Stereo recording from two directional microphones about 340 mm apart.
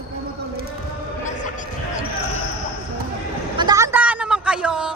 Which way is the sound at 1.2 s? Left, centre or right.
Left.